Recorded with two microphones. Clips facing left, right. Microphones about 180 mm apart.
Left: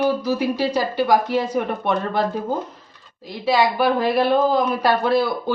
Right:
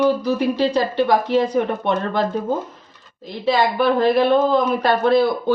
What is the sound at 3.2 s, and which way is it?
Speech, 5° left (ahead or behind).